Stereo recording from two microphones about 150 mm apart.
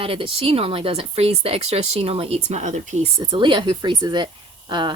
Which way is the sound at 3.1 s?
30° right (ahead or behind).